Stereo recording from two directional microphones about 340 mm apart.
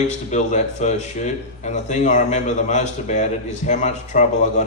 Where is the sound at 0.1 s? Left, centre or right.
Left.